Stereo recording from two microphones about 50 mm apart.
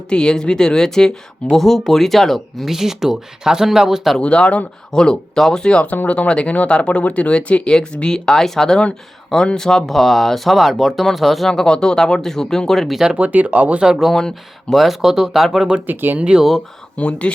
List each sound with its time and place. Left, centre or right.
0.1 s speech: centre
4.2 s speech: left; by 13.0 s centre
13.1 s speech: right
13.8 s speech: centre
14.1 s speech: centre
15.9 s speech: right
16.1 s speech: right
17.0 s speech: left